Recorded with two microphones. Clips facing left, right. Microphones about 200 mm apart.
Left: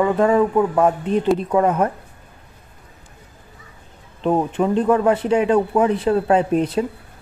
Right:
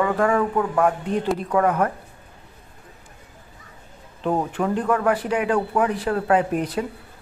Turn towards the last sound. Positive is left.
turn(degrees=25)  # may be behind; listen again after turning